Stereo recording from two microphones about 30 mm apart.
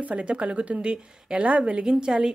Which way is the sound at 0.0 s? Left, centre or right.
Right.